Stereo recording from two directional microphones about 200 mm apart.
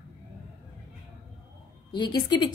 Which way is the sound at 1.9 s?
20° left (ahead or behind).